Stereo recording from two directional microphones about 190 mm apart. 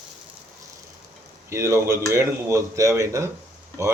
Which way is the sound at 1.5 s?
15° right (ahead or behind).